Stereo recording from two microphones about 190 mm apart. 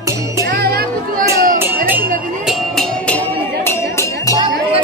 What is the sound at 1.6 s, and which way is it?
Music, 10° right (ahead or behind).